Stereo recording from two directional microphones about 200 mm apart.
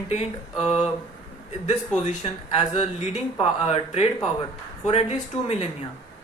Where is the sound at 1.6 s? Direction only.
35° left (ahead or behind).